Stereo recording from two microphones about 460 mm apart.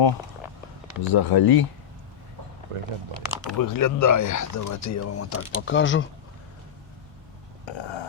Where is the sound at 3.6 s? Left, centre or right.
Left.